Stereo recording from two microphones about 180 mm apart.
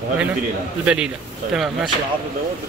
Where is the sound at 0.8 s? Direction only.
5° right (ahead or behind).